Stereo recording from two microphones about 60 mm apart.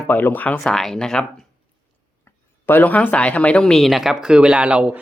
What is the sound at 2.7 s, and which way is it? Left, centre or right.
Speech, left.